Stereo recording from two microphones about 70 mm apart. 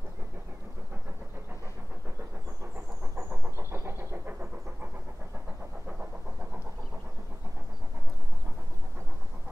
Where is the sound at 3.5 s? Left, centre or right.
Right.